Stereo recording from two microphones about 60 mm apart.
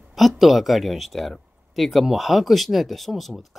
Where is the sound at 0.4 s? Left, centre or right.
Centre.